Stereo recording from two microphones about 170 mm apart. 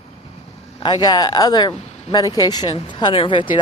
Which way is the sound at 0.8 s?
25° left (ahead or behind).